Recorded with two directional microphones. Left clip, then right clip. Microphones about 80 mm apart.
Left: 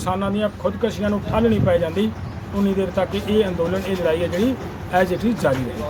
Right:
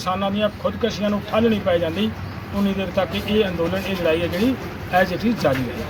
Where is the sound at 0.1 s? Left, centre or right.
Left.